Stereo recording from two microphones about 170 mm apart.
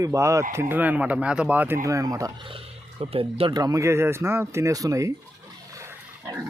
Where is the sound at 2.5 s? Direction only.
35° right (ahead or behind).